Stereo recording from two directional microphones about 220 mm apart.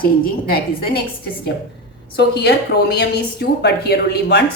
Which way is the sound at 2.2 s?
50° left (ahead or behind).